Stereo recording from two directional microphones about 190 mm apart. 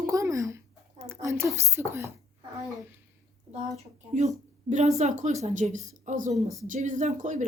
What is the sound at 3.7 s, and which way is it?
Speech, 35° right (ahead or behind).